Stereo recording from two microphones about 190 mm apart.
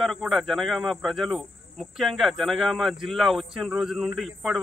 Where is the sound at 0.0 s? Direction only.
Centre (ahead or behind).